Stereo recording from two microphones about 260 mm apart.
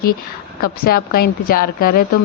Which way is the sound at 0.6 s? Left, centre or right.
Left.